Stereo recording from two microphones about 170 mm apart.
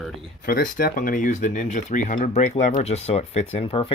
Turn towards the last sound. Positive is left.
turn(degrees=35)  # may be behind; listen again after turning